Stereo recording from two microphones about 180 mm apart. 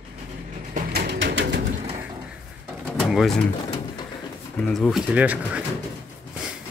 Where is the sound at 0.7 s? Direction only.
65° right (ahead or behind); by 1.6 s 85° right.